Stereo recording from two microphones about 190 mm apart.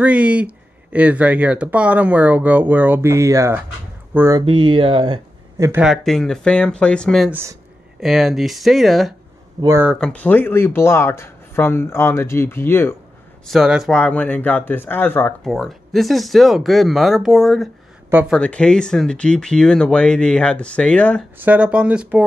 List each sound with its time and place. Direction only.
0.0 s speech: 5° right (ahead or behind)
4.4 s speech: 25° right (ahead or behind)
5.6 s speech: 10° right (ahead or behind)
9.6 s speech: 15° right (ahead or behind)
9.8 s speech: 5° left (ahead or behind)
13.5 s speech: centre (ahead or behind)
15.4 s speech: centre (ahead or behind)
21.4 s speech: 5° right (ahead or behind)